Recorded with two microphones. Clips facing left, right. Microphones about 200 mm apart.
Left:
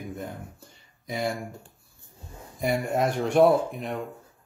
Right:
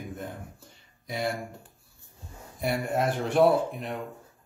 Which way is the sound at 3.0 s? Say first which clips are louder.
Left 2 dB; centre (ahead or behind).